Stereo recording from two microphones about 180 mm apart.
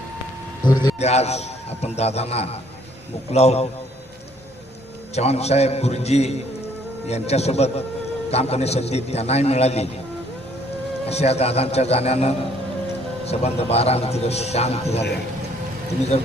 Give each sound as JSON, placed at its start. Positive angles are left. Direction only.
{"t": 0.6, "sound": "a man's voice", "side_deg": 25}
{"t": 0.9, "sound": "a man's voice", "side_deg": 35}
{"t": 5.1, "sound": "a man's voice", "side_deg": 35}
{"t": 11.1, "sound": "a man's voice", "side_deg": 35}